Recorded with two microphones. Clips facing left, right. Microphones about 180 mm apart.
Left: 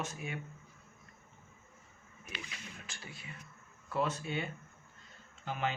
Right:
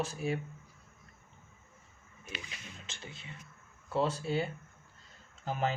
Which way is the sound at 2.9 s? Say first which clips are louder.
Right 1 dB; 25° right (ahead or behind).